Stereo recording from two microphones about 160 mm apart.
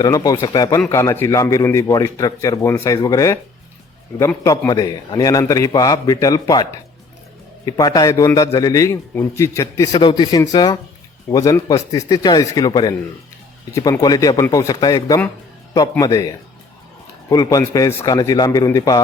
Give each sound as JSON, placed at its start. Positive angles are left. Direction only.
{"t": 0.0, "sound": "a man's voice", "side_deg": 25}
{"t": 4.4, "sound": "a man's voice", "side_deg": 20}